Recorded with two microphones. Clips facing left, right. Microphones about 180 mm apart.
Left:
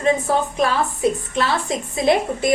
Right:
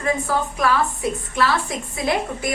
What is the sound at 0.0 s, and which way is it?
A woman's voice, 25° left (ahead or behind).